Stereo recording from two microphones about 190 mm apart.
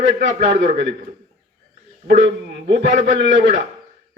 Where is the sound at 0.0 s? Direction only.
75° right (ahead or behind).